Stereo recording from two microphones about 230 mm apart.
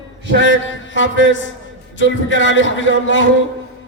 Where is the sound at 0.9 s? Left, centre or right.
Left.